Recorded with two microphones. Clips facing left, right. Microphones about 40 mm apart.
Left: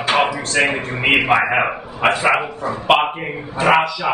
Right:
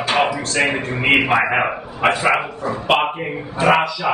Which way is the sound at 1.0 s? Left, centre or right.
Centre.